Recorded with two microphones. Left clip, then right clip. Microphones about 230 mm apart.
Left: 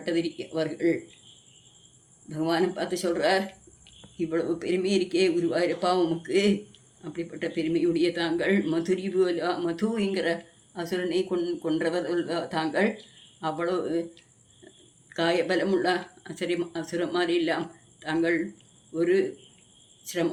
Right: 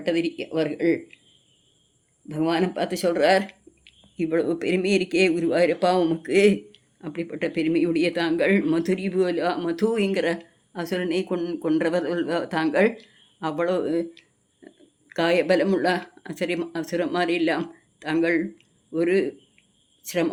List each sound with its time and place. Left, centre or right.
0.0 s speech: right
2.3 s speech: right